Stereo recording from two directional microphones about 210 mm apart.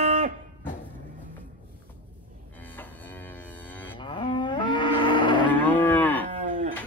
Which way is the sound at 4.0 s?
25° left (ahead or behind).